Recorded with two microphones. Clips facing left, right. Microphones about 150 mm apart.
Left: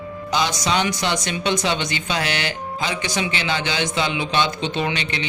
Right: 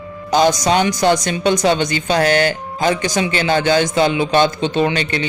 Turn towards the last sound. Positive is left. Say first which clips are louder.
# right 7 dB
turn(degrees=-45)  # may be behind; listen again after turning